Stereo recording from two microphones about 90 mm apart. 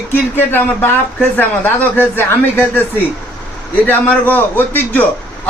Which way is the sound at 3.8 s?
20° left (ahead or behind).